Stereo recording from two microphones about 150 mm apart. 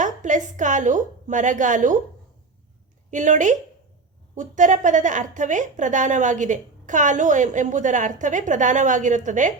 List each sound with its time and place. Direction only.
0.0 s a woman's voice: 55° right (ahead or behind)
3.1 s a woman's voice: 55° right (ahead or behind)